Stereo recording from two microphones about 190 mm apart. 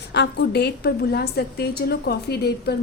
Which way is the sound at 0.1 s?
60° left (ahead or behind).